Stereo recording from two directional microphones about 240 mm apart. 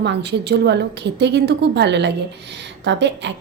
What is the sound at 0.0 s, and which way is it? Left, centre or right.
A woman's voice, right.